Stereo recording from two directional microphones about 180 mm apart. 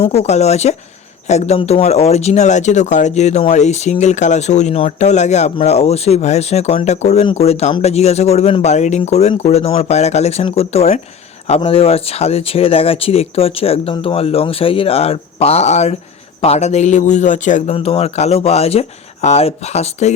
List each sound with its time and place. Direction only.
0.0 s speech: 35° left (ahead or behind)